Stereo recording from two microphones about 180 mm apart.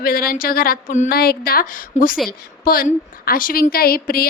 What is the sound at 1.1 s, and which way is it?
A woman's voice, 60° left (ahead or behind).